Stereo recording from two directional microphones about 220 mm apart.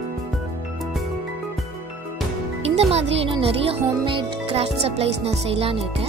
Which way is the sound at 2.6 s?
30° right (ahead or behind).